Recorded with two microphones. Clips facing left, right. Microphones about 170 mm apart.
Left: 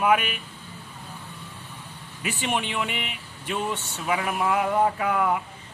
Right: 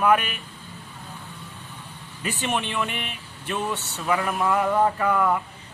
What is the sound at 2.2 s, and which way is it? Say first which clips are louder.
Speech: right 1 dB; 15° left (ahead or behind).